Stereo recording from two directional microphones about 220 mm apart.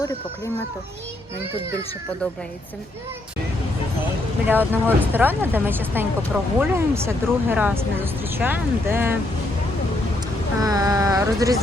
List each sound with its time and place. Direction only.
4.4 s speech: 10° right (ahead or behind)
10.6 s speech: 15° right (ahead or behind)